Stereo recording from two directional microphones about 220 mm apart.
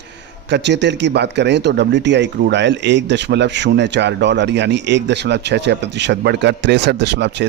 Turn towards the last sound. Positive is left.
turn(degrees=-50)  # may be behind; listen again after turning